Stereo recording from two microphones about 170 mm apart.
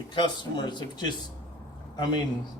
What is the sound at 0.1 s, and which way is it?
Speech, 25° left (ahead or behind).